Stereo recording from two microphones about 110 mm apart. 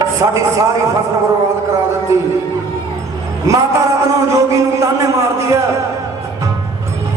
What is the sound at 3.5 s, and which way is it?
A man's voice, 30° right (ahead or behind).